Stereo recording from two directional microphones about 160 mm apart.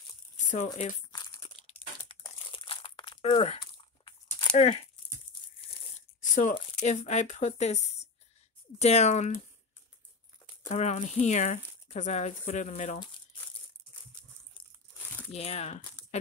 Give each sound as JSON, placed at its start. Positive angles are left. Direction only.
{"t": 1.7, "sound": "crumpling", "side_deg": 40}
{"t": 4.0, "sound": "a sound", "side_deg": 30}
{"t": 4.6, "sound": "speech", "side_deg": 45}
{"t": 5.9, "sound": "tearing", "side_deg": 50}
{"t": 6.5, "sound": "speech", "side_deg": 45}
{"t": 10.7, "sound": "speech", "side_deg": 45}
{"t": 15.3, "sound": "speech", "side_deg": 40}